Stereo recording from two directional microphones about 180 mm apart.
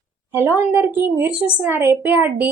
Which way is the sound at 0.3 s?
10° right (ahead or behind).